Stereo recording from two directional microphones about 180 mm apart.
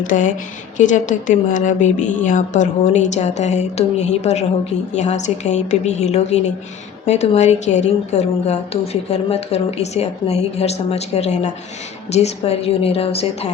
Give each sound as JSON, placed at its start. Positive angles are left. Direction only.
{"t": 0.1, "sound": "a woman's voice", "side_deg": 45}